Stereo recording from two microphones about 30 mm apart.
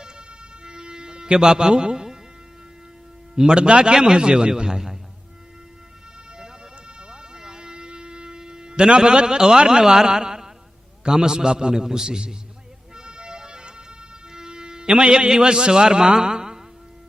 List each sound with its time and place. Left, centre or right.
0.0 s music: right
3.4 s a man's voice: right
7.1 s music: right
11.1 s a man's voice: right
13.0 s music: right
14.3 s a sound: right
15.3 s a man's voice: right